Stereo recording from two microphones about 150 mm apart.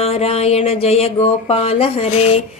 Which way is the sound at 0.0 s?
40° left (ahead or behind).